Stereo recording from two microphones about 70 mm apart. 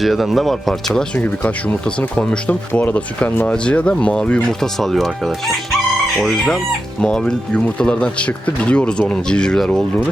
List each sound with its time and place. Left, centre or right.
0.0 s speech: centre
1.1 s speech: left
4.8 s speech: centre
6.3 s speech: centre